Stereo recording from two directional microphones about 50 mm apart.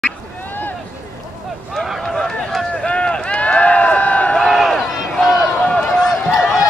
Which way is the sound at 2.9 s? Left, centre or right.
Left.